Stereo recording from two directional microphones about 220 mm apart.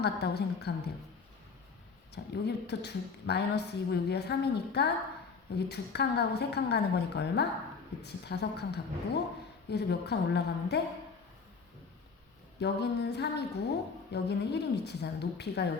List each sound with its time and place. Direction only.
0.0 s a woman's voice: 50° left (ahead or behind)
2.1 s a woman's voice: 50° left (ahead or behind)
12.5 s a woman's voice: 50° left (ahead or behind)